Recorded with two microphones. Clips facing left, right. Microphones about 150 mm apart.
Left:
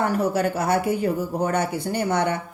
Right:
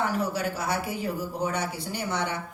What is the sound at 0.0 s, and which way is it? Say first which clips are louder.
Speech: left 6 dB; 50° left (ahead or behind).